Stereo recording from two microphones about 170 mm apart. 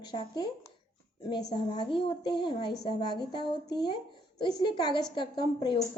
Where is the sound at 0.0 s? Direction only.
25° left (ahead or behind).